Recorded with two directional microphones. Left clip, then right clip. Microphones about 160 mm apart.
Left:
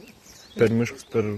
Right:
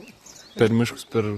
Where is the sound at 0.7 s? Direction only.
50° right (ahead or behind).